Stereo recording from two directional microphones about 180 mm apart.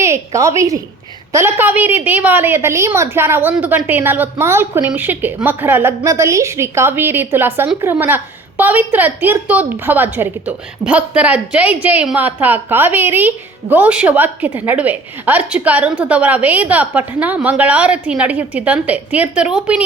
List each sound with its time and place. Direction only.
0.0 s a woman's voice: 15° right (ahead or behind)